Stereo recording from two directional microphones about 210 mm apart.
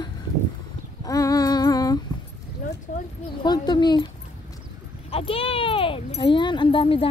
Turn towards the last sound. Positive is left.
turn(degrees=25)  # may be behind; listen again after turning